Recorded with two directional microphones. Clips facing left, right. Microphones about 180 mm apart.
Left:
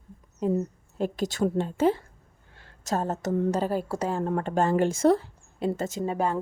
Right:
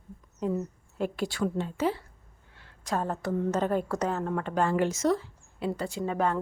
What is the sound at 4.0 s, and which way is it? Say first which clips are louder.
Speech: left 2 dB; 30° left (ahead or behind).